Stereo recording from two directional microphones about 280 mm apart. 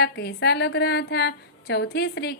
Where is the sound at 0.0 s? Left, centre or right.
Left.